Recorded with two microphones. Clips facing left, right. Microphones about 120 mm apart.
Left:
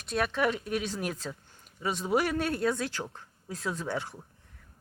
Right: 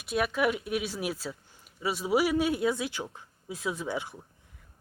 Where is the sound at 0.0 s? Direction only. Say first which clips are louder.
Right 1 dB; 5° right (ahead or behind).